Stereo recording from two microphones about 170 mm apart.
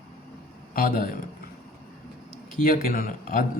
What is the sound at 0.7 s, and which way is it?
Speech, 55° left (ahead or behind).